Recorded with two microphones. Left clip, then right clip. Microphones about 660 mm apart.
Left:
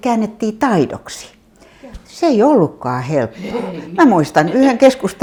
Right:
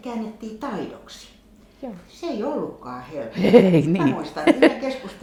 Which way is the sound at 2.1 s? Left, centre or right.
Left.